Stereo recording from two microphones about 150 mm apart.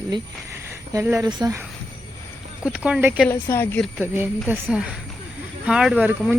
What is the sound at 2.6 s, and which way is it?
Speech, 5° right (ahead or behind).